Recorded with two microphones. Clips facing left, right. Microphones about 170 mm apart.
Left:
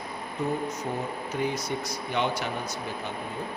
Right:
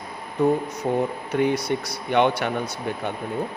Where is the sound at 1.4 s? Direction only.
65° right (ahead or behind).